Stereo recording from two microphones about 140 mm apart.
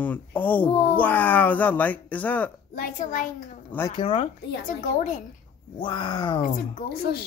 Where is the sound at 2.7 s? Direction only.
80° left.